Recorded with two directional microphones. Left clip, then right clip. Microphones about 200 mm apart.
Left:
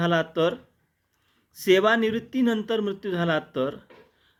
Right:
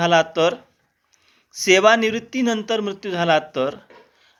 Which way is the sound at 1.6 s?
15° left (ahead or behind).